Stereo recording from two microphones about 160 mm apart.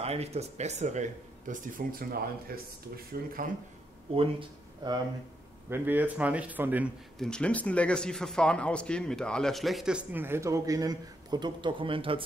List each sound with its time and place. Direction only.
0.0 s speech: 40° right (ahead or behind)
1.5 s speech: 60° right (ahead or behind)
4.1 s speech: 35° right (ahead or behind)
5.7 s speech: 10° right (ahead or behind)
7.2 s a man's voice: 5° left (ahead or behind); by 12.2 s 35° right (ahead or behind)